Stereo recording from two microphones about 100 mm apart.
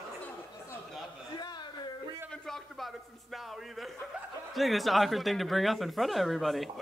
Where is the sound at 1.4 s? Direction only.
45° left (ahead or behind).